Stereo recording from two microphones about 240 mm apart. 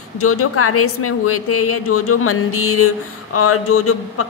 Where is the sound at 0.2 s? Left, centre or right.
Left.